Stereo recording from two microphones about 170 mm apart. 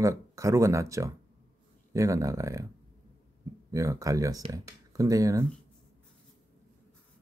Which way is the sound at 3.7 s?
20° right (ahead or behind).